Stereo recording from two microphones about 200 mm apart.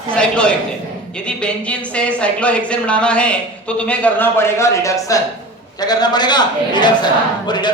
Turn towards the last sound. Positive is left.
turn(degrees=20)  # may be behind; listen again after turning